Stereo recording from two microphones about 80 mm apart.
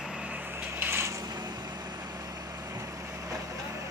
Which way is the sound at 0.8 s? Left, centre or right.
Right.